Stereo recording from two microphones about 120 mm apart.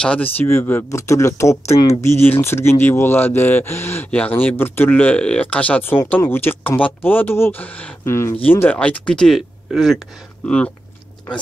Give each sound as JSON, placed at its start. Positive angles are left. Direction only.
{"t": 0.0, "sound": "speech", "side_deg": 10}